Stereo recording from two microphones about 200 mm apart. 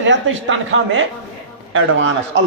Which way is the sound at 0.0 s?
70° right (ahead or behind).